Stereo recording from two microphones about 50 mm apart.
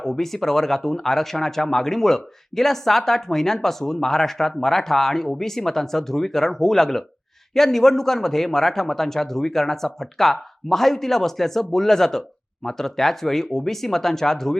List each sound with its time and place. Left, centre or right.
0.0 s speech: centre